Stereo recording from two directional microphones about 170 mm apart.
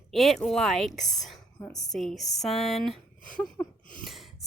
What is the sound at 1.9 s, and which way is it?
Speech, centre (ahead or behind).